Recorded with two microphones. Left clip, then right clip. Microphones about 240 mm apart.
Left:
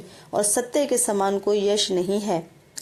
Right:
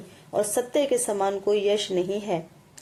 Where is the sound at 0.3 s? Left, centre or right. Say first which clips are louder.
Left 2 dB; left.